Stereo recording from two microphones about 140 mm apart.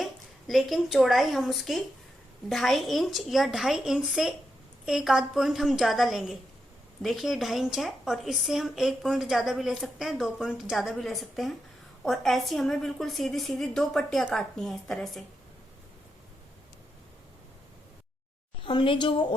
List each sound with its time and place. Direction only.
0.0 s a woman's voice: centre (ahead or behind)
18.6 s a woman's voice: 35° left (ahead or behind)